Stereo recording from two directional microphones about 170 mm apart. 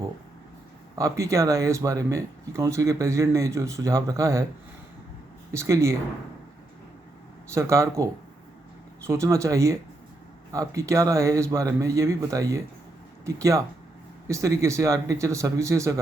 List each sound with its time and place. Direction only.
0.9 s speech: 20° right (ahead or behind)
5.5 s speech: 20° right (ahead or behind)
7.5 s speech: 15° right (ahead or behind)
9.0 s speech: 15° right (ahead or behind)